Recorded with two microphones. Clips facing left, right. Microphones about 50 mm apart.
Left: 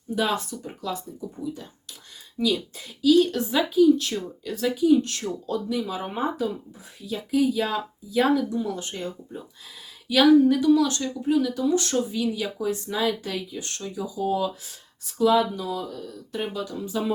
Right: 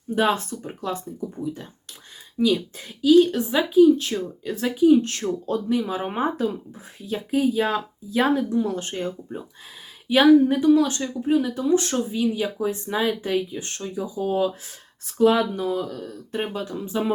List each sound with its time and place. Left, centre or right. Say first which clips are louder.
0.2 s speech: right 4 dB; right
2.4 s speech: right 4 dB; right
10.1 s speech: right 1 dB; right